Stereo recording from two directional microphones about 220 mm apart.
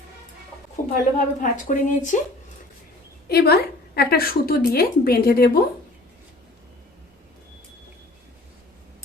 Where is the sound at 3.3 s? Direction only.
45° left (ahead or behind).